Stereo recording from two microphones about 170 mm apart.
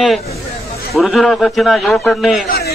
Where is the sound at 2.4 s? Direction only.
65° left (ahead or behind).